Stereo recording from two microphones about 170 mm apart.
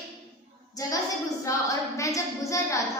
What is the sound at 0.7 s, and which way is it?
Child singing, 20° left (ahead or behind).